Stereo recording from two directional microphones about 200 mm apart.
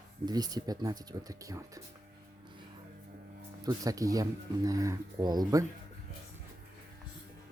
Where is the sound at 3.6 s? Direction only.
20° right (ahead or behind).